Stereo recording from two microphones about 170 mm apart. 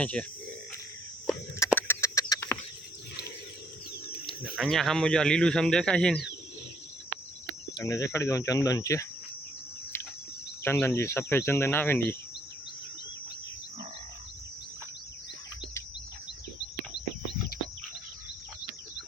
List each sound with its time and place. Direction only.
0.0 s speech: 5° left (ahead or behind)
1.5 s a sound: 15° left (ahead or behind)
2.3 s chicken: 15° left (ahead or behind)
4.3 s speech: centre (ahead or behind)
7.8 s speech: 20° left (ahead or behind)
10.6 s speech: 15° left (ahead or behind)